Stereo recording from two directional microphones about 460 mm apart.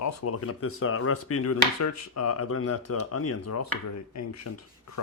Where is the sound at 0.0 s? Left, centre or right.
Left.